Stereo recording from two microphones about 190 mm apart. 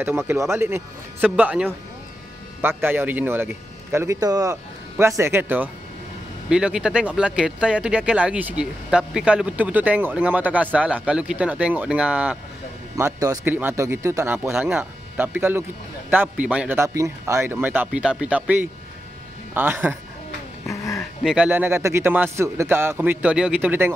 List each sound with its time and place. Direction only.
0.0 s speech: 10° right (ahead or behind)
2.8 s speech: 10° right (ahead or behind)
12.9 s speech: 15° right (ahead or behind)
20.6 s a sound: 15° left (ahead or behind)
21.0 s speech: centre (ahead or behind)